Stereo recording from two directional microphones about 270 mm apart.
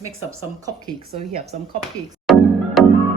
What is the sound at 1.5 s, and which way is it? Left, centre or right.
Speech, right.